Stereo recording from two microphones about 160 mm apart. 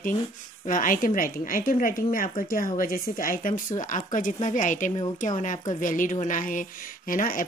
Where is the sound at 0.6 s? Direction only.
55° left (ahead or behind).